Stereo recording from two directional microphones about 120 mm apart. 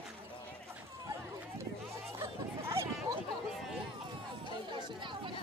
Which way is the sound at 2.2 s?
25° right (ahead or behind).